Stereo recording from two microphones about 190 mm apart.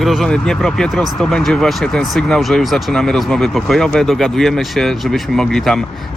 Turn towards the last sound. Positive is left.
turn(degrees=0)  # may be behind; listen again after turning